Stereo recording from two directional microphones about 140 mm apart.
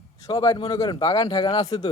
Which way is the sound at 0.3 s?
30° left (ahead or behind).